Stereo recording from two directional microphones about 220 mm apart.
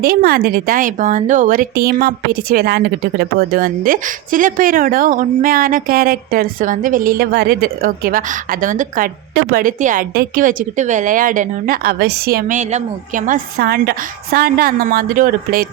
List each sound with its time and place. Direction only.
0.0 s a woman's voice: 45° right (ahead or behind)